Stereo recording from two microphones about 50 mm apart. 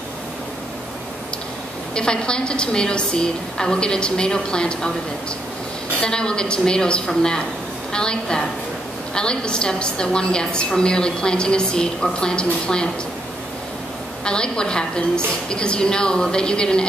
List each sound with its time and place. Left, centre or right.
2.0 s a woman's voice: centre
5.9 s a woman's voice: centre
14.2 s a woman's voice: centre